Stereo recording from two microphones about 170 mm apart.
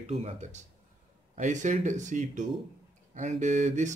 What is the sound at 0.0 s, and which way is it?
Speech, 35° right (ahead or behind).